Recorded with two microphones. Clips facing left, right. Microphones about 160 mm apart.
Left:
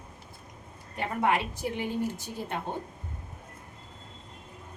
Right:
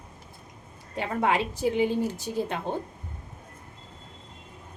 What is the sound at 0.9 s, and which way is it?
A woman's voice, 90° right.